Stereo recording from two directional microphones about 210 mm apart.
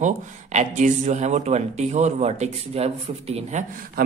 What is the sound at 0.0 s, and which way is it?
Speech, 35° right (ahead or behind).